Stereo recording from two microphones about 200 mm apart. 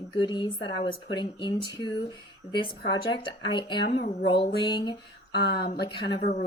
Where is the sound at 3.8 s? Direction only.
45° left (ahead or behind).